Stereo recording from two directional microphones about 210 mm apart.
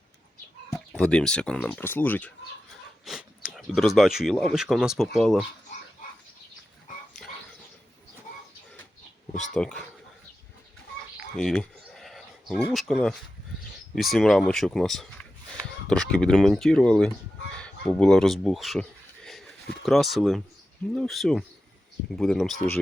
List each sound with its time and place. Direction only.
0.9 s speech: 5° left (ahead or behind)
3.0 s speech: 5° right (ahead or behind)
9.6 s speech: 5° left (ahead or behind)
11.3 s a sound: 5° left (ahead or behind)
12.7 s speech: centre (ahead or behind)